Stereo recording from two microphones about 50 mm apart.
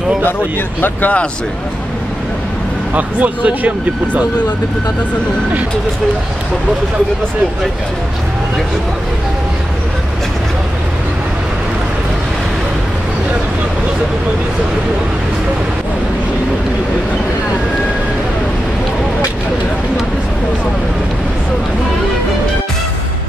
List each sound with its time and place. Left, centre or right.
0.7 s speech: left
2.9 s speech: right